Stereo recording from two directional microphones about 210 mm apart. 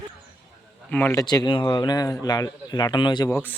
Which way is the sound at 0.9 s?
10° left (ahead or behind).